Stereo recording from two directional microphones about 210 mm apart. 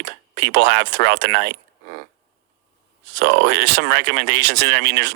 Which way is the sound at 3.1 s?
55° right (ahead or behind).